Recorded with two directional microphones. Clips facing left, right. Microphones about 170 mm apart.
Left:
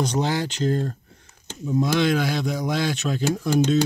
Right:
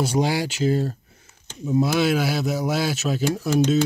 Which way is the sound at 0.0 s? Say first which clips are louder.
Right 2 dB; 10° right (ahead or behind).